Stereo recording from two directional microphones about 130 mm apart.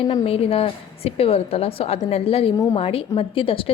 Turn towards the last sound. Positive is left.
turn(degrees=45)  # may be behind; listen again after turning